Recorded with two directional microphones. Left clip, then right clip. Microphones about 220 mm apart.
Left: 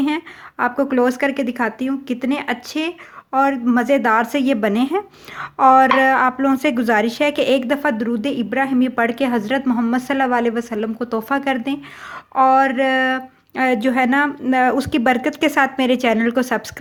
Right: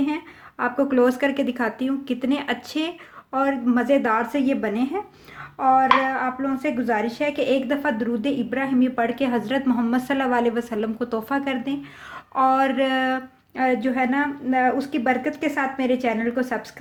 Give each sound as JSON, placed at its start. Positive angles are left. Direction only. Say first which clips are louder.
{"t": 0.6, "sound": "speech", "louder": "left 3 dB", "side_deg": 20}